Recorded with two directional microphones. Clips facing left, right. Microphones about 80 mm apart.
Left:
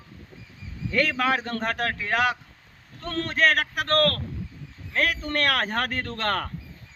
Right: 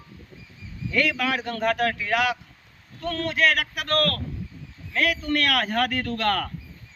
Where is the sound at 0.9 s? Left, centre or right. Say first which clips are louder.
Left 1 dB; left.